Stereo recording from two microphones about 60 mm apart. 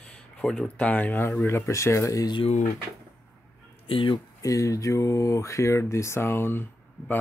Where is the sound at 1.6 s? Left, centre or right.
Left.